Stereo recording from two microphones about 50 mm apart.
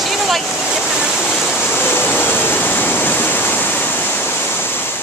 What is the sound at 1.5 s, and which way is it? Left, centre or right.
Waterfall, left.